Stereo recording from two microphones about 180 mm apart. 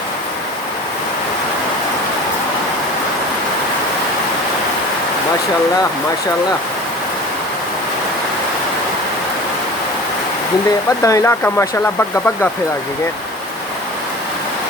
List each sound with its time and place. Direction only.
11.0 s speech: 15° left (ahead or behind)